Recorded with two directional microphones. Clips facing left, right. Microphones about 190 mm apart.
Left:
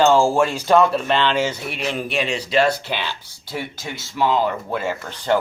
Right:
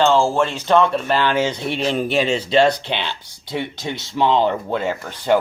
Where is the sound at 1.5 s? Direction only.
25° right (ahead or behind).